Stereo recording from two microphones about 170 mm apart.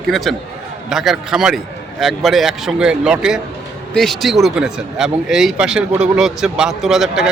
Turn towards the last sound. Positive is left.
turn(degrees=-5)  # may be behind; listen again after turning